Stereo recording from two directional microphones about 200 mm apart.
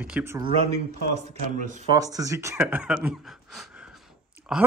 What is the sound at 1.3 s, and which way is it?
Speech, 40° right (ahead or behind).